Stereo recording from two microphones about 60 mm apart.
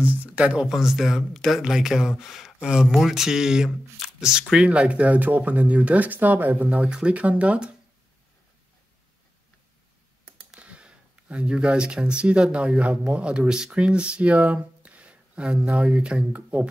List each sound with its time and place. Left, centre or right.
0.0 s speech: right
0.7 s speech: centre; by 7.7 s right
10.6 s speech: centre